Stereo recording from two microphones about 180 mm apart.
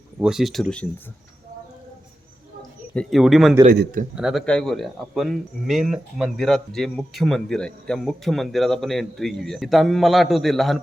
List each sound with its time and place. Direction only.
0.2 s speech: 5° right (ahead or behind)
2.6 s a sound: 5° left (ahead or behind)
3.7 s a man's voice: 50° right (ahead or behind)
4.1 s speech: 5° right (ahead or behind)